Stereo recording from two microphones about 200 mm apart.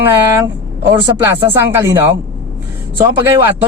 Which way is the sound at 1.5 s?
10° right (ahead or behind).